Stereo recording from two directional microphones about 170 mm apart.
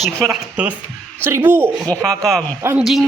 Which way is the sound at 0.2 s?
5° right (ahead or behind).